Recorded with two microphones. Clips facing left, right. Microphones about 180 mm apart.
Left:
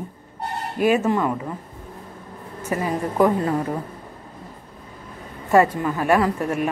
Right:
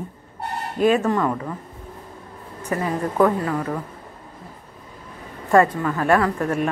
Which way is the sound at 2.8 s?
15° left (ahead or behind).